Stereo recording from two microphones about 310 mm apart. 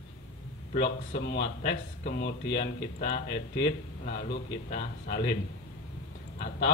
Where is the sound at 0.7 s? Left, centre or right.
Left.